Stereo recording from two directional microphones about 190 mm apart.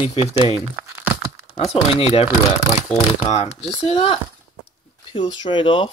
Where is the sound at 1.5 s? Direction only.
30° left (ahead or behind).